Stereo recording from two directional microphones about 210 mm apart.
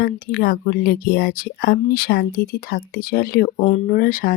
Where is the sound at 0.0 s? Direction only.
40° left (ahead or behind).